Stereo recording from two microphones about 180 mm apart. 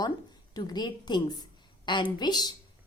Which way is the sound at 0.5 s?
25° left (ahead or behind).